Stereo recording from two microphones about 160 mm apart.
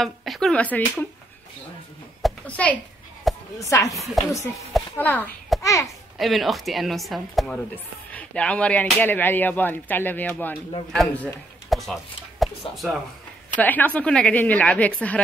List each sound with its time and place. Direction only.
0.0 s speech: centre (ahead or behind)
2.2 s a woman's voice: 10° left (ahead or behind)
3.5 s a child's voice: 20° left (ahead or behind)
6.1 s speech: centre (ahead or behind)
11.7 s a sound: centre (ahead or behind)
13.6 s speech: 10° left (ahead or behind)